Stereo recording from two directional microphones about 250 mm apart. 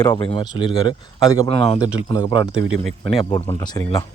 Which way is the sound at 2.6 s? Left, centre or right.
Centre.